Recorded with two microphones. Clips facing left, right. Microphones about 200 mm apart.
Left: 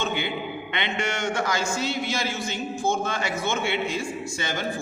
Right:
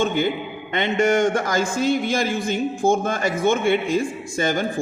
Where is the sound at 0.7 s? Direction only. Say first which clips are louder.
Right 11 dB; 45° right (ahead or behind).